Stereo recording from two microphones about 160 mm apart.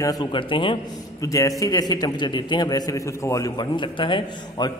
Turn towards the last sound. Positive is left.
turn(degrees=30)  # may be behind; listen again after turning